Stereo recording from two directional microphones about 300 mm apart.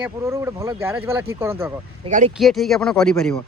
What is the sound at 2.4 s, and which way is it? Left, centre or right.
Speech, centre.